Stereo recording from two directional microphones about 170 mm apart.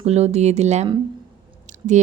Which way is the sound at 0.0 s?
40° right (ahead or behind).